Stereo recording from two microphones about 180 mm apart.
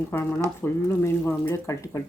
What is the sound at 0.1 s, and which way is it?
Speech, 15° left (ahead or behind).